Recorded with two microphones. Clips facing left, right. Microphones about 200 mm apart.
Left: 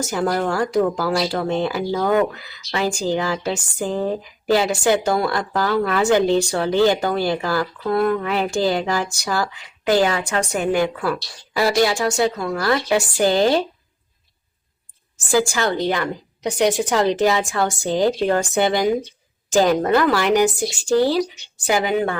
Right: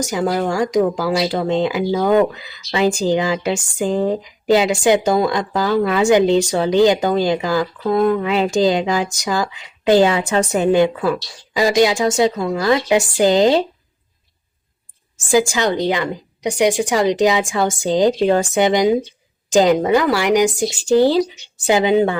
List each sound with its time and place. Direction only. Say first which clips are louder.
0.0 s speech: right 2 dB; 15° right (ahead or behind)
15.3 s a woman's voice: right 3 dB; 15° right (ahead or behind)